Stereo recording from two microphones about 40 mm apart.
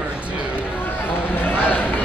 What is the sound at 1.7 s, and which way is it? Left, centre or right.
Run, left.